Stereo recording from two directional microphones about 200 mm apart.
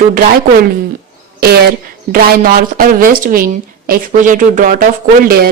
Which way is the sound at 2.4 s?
50° right (ahead or behind).